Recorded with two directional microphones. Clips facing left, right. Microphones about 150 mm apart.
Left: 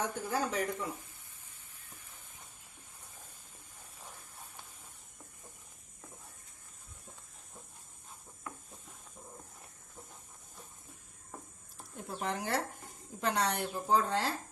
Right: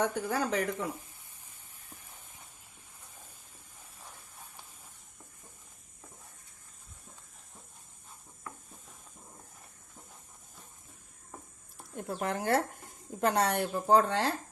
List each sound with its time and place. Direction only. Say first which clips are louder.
0.0 s speech: right 4 dB; 70° right (ahead or behind)
11.9 s speech: right 4 dB; 55° right (ahead or behind)
13.8 s speech: right 5 dB; 65° right (ahead or behind)